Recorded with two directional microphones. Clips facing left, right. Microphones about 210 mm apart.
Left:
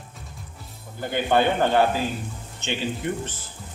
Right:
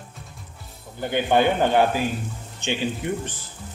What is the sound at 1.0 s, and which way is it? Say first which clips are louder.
Speech: right 1 dB; 15° right (ahead or behind).